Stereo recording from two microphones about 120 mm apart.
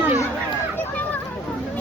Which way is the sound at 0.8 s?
15° left (ahead or behind).